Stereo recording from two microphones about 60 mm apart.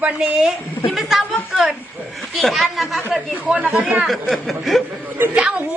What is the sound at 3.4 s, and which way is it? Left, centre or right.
Speech, right.